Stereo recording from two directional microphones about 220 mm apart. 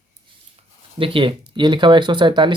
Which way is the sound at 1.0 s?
25° right (ahead or behind).